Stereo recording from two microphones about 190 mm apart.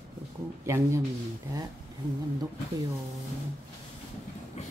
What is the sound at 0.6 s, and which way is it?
Speech, 15° right (ahead or behind).